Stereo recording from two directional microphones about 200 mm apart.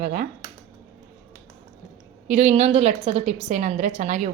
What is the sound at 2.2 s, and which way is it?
A woman's voice, 35° right (ahead or behind).